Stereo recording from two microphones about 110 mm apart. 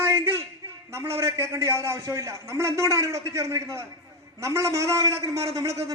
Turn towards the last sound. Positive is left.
turn(degrees=-30)  # may be behind; listen again after turning